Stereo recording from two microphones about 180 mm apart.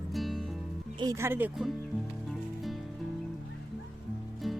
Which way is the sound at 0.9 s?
20° right (ahead or behind).